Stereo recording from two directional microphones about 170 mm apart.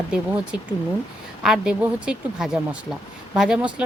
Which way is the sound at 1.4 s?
5° right (ahead or behind).